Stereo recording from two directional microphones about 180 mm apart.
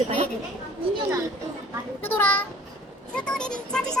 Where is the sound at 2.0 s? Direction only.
10° left (ahead or behind).